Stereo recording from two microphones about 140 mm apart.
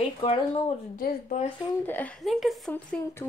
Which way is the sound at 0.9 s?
80° left.